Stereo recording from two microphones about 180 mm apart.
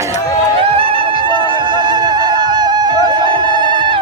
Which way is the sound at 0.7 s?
30° right (ahead or behind).